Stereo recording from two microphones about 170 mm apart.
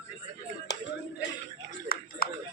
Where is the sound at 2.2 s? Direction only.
60° left (ahead or behind).